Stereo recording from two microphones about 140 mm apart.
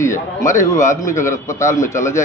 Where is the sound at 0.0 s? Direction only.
20° left (ahead or behind).